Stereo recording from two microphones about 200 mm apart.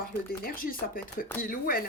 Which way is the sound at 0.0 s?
45° left (ahead or behind).